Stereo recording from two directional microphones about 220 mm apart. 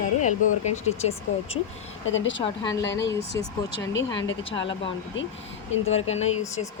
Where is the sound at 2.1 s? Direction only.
60° left (ahead or behind).